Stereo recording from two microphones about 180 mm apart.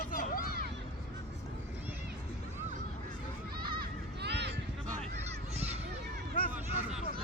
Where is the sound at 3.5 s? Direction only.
55° right (ahead or behind).